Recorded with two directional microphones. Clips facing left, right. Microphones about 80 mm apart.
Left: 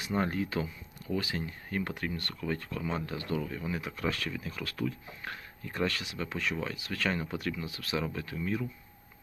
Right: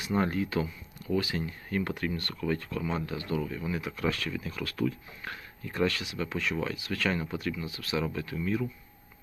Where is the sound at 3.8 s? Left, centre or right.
Left.